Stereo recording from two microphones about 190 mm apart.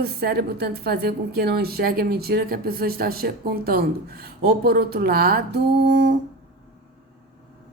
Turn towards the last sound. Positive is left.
turn(degrees=-65)  # may be behind; listen again after turning